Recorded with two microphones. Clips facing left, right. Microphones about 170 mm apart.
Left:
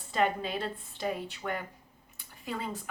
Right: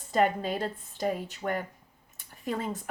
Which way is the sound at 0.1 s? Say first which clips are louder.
Right 3 dB; 45° right (ahead or behind).